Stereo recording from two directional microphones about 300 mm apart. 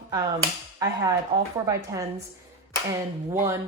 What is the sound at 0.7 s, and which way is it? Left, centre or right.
Cap gun, centre.